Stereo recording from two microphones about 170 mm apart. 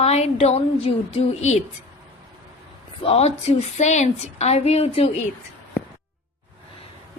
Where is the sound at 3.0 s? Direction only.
35° left (ahead or behind).